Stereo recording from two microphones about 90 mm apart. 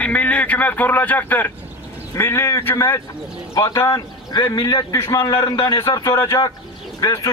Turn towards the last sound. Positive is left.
turn(degrees=40)  # may be behind; listen again after turning